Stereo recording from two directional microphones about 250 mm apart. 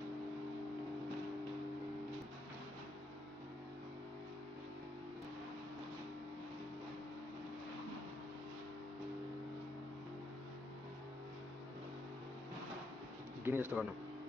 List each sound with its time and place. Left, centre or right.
13.4 s speech: centre